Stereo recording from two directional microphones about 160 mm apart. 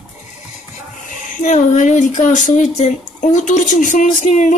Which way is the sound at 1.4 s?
50° left (ahead or behind).